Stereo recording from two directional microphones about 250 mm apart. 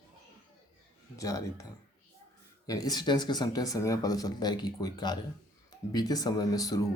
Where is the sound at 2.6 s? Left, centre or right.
Centre.